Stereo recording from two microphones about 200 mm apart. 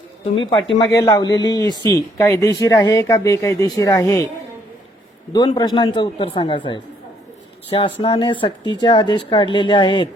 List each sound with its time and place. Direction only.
0.5 s speech: 25° left (ahead or behind)
5.5 s speech: 25° left (ahead or behind)